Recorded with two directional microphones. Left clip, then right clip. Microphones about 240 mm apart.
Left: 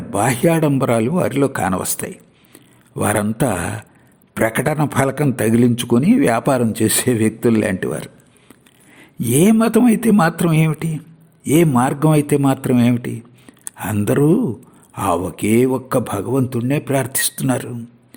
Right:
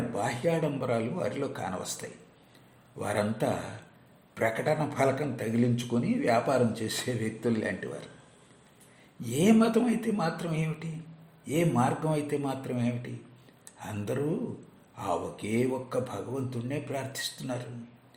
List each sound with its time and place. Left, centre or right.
0.1 s a man's voice: left
9.2 s a man's voice: left